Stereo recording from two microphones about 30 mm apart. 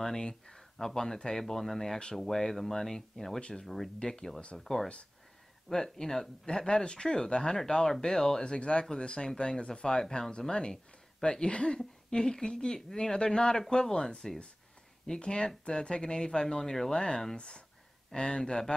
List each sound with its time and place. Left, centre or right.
0.2 s speech: left
0.6 s speech: centre
4.5 s speech: centre
6.4 s speech: left
8.5 s speech: left
10.0 s speech: centre
10.5 s speech: left
15.1 s speech: left